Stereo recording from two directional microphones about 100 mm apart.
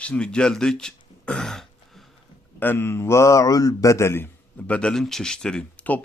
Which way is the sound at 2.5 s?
20° left (ahead or behind).